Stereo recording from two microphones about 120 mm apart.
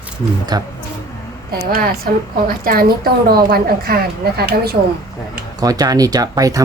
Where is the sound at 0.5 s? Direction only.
35° right (ahead or behind).